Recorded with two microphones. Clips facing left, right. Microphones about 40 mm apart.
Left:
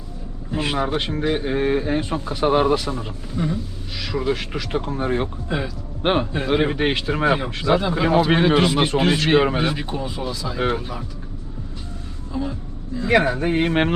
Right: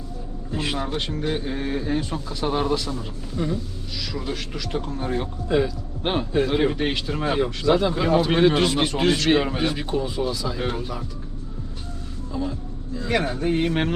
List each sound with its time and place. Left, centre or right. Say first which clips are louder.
0.5 s speech: left 4 dB; centre
3.3 s speech: left 1 dB; centre
4.0 s speech: left 7 dB; left
5.5 s speech: right 10 dB; centre
6.0 s speech: left 2 dB; left
12.3 s speech: left 2 dB; centre; by 13.9 s left